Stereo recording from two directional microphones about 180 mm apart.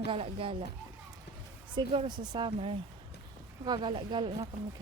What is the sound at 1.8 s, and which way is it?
Speech, 25° right (ahead or behind).